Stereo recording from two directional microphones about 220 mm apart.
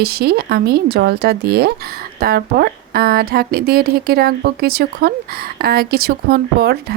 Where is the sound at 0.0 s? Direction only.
45° right (ahead or behind).